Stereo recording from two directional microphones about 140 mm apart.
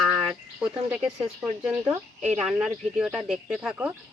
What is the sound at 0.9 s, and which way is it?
Speech, 10° right (ahead or behind).